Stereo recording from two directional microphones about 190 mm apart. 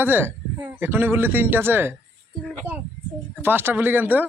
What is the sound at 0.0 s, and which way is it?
A man's voice, 10° right (ahead or behind).